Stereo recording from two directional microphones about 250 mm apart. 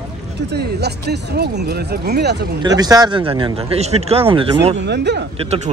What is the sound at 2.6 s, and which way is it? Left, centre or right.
Speech, centre.